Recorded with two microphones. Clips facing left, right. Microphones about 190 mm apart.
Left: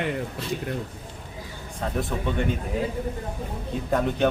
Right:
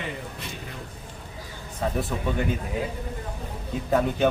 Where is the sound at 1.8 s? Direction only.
5° right (ahead or behind).